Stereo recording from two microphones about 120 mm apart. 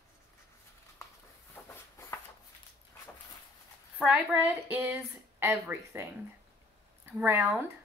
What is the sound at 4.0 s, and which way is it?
Speech, 5° right (ahead or behind).